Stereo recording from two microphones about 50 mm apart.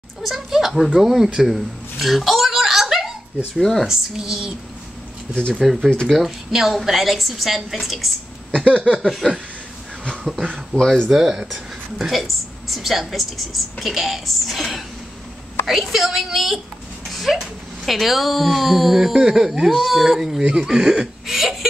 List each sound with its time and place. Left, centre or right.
0.2 s speech: centre
0.9 s a sound: centre
3.5 s a woman's voice: centre
3.8 s speech: centre
5.5 s a woman's voice: centre
8.6 s a sound: centre
9.0 s a woman's voice: centre
10.4 s speech: centre
11.1 s a woman's voice: centre